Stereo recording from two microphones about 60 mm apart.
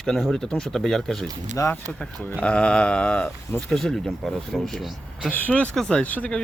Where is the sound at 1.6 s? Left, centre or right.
Left.